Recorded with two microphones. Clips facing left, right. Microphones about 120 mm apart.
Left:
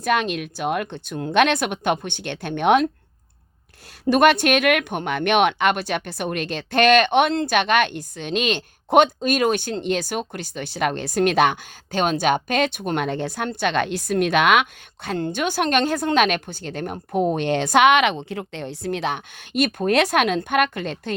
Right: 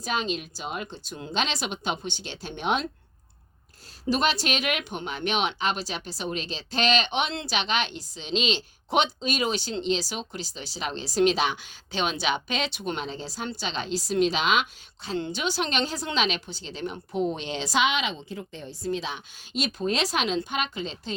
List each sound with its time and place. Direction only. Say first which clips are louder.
0.0 s speech: left 7 dB; 60° left (ahead or behind)
4.0 s speech: left 9 dB; 60° left (ahead or behind)